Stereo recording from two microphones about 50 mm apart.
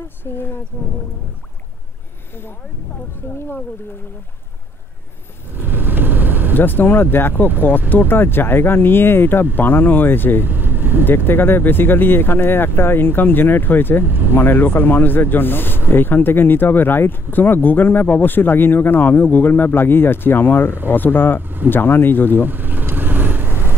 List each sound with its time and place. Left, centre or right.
0.2 s speech: left
5.5 s vehicle: right
6.5 s speech: left
10.4 s vehicle: right
11.1 s speech: left
21.4 s speech: right
21.6 s speech: left
22.5 s vehicle: right